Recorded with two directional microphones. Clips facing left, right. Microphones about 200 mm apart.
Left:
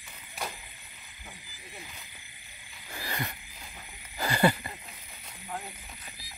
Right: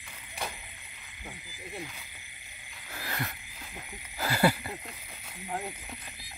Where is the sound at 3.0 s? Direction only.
Centre (ahead or behind).